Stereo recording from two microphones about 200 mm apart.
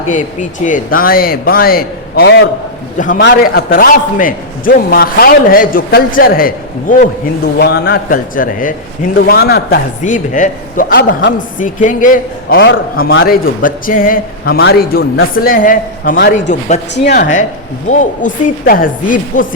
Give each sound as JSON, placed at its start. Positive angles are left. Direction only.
{"t": 0.6, "sound": "a man's voice", "side_deg": 45}
{"t": 11.3, "sound": "a woman's voice", "side_deg": 40}
{"t": 12.5, "sound": "a man's voice", "side_deg": 60}
{"t": 13.2, "sound": "a man's voice", "side_deg": 45}
{"t": 16.5, "sound": "a woman's voice", "side_deg": 35}
{"t": 16.9, "sound": "a man's voice", "side_deg": 55}
{"t": 17.8, "sound": "a woman's voice", "side_deg": 40}